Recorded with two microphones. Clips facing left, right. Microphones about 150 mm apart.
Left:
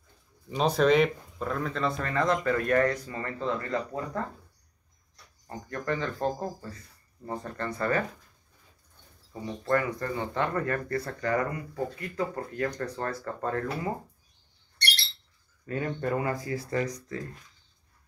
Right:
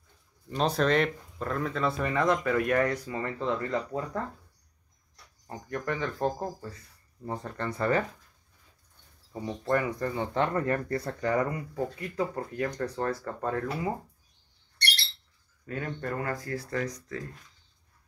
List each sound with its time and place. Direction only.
0.5 s speech: centre (ahead or behind)
5.5 s speech: 15° right (ahead or behind)
9.3 s speech: 20° right (ahead or behind)
15.6 s speech: 5° left (ahead or behind)